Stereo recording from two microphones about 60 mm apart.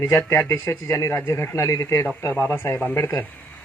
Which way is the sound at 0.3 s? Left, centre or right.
Left.